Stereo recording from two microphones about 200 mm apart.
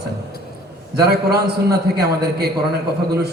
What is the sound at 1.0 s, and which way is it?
A man's voice, 50° right (ahead or behind).